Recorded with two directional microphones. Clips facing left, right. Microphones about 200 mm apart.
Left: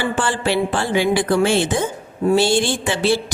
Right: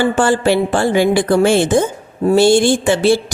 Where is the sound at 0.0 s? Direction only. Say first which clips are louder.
Right 7 dB; 45° right (ahead or behind).